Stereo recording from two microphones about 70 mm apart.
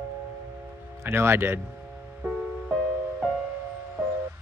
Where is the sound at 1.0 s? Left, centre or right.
Right.